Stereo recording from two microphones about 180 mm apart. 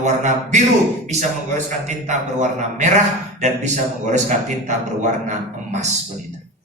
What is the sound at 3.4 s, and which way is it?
A man's voice, 40° right (ahead or behind).